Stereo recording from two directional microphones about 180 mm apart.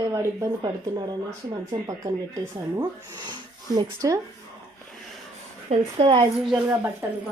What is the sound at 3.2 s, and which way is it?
Speech, 20° right (ahead or behind).